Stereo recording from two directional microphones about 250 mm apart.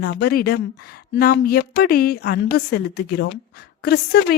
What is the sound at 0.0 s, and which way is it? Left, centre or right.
Speech, left.